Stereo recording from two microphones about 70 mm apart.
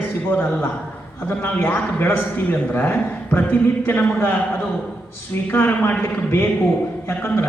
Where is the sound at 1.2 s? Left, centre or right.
Left.